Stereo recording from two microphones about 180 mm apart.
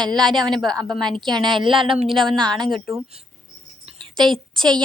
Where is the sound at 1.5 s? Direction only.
30° right (ahead or behind).